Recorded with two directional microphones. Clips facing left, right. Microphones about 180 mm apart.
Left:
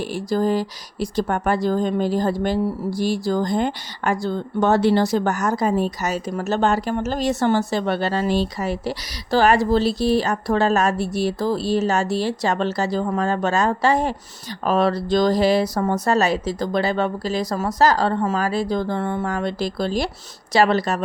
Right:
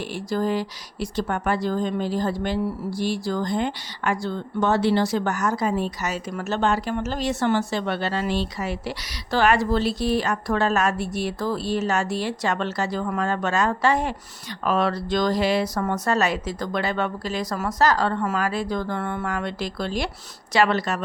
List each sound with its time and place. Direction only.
0.3 s speech: 40° left (ahead or behind)